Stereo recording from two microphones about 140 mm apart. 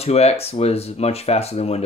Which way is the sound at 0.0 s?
50° left (ahead or behind).